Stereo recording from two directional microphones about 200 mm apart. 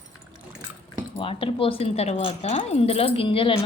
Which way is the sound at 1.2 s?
25° left (ahead or behind).